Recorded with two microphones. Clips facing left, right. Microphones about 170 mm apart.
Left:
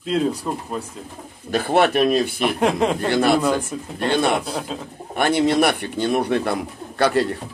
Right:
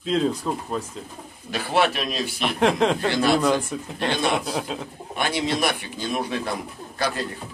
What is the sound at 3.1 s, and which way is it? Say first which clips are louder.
Speech: left 6 dB; 55° left (ahead or behind).